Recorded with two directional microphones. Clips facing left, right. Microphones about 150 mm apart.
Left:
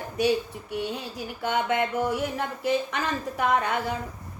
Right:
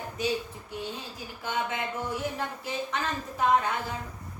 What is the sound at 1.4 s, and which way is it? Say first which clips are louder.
A woman's voice: left 6 dB; 65° left (ahead or behind).